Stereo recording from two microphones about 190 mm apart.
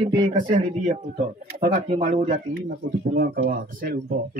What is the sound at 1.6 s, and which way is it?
Speech, 35° right (ahead or behind).